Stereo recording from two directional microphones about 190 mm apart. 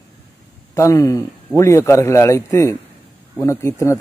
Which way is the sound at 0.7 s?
15° left (ahead or behind).